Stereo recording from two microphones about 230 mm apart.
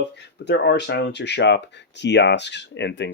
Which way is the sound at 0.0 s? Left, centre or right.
Left.